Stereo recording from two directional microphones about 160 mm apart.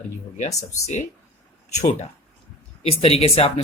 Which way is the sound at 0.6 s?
45° left (ahead or behind).